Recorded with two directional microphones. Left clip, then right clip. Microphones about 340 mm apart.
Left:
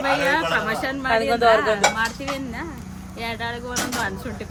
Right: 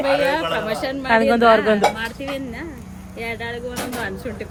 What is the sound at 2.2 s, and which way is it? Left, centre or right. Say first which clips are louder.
Speech: right 1 dB; centre.